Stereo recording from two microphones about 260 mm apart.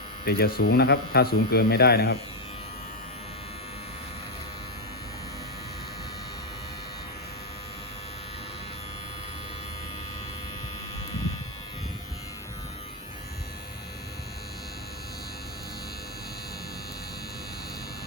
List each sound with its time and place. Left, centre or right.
0.3 s speech: left